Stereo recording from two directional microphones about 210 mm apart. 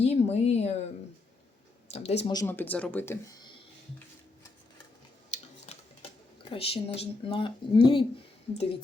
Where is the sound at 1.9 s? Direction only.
30° left (ahead or behind).